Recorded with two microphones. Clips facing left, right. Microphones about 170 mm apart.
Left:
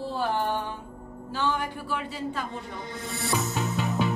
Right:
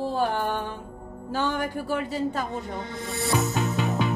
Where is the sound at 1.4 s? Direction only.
50° right (ahead or behind).